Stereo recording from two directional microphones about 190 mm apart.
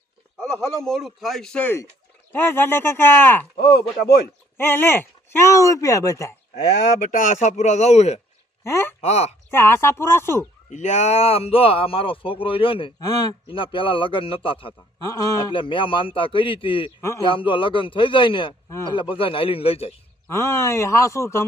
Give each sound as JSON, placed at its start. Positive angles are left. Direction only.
{"t": 0.3, "sound": "speech", "side_deg": 5}
{"t": 3.6, "sound": "speech", "side_deg": 55}
{"t": 4.5, "sound": "speech", "side_deg": 10}
{"t": 7.1, "sound": "speech", "side_deg": 45}
{"t": 8.6, "sound": "speech", "side_deg": 15}
{"t": 9.0, "sound": "speech", "side_deg": 35}
{"t": 9.5, "sound": "speech", "side_deg": 10}
{"t": 10.7, "sound": "speech", "side_deg": 40}
{"t": 17.0, "sound": "speech", "side_deg": 15}
{"t": 17.2, "sound": "speech", "side_deg": 25}
{"t": 20.3, "sound": "speech", "side_deg": 15}